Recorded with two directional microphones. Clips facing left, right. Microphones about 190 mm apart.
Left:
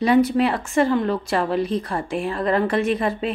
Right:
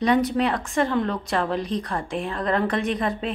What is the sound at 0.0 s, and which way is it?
A woman's voice, 5° left (ahead or behind).